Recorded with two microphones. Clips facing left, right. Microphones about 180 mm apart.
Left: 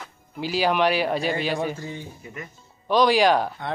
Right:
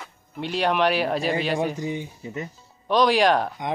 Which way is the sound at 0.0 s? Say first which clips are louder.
Left 1 dB; centre (ahead or behind).